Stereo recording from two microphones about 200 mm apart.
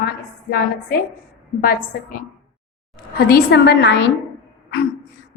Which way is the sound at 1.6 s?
45° left (ahead or behind).